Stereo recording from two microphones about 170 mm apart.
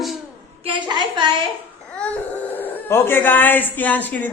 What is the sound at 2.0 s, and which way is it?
Speech, 10° left (ahead or behind).